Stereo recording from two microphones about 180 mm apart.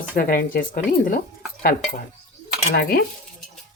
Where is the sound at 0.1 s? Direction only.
55° left (ahead or behind).